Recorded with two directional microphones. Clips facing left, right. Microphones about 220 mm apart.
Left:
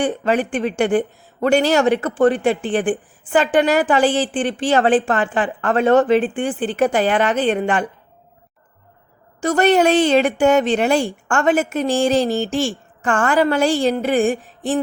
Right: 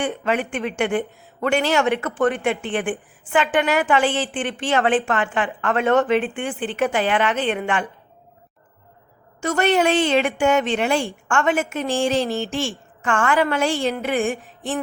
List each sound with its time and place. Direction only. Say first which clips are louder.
0.0 s speech: left 4 dB; 35° left (ahead or behind)
9.4 s speech: left 4 dB; 35° left (ahead or behind)